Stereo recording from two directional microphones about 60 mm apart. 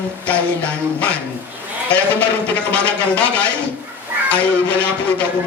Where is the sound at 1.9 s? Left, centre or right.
Left.